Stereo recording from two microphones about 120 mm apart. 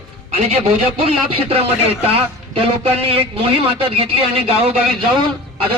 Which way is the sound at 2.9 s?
55° right (ahead or behind).